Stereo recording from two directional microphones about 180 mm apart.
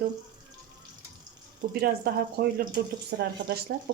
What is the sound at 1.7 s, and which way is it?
Speech, 60° right (ahead or behind).